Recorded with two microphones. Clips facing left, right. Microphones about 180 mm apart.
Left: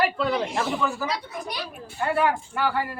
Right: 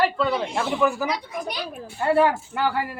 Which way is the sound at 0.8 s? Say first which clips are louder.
Right 5 dB; 15° right (ahead or behind).